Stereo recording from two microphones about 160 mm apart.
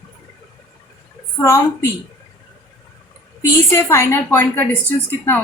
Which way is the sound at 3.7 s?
15° left (ahead or behind).